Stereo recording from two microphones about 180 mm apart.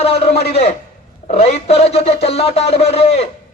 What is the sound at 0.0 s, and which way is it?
Speech, 35° left (ahead or behind).